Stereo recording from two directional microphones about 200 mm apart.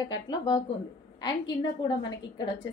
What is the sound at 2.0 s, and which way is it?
Speech, 20° left (ahead or behind).